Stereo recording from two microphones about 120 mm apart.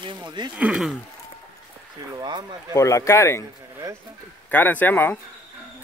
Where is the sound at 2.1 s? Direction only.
40° right (ahead or behind).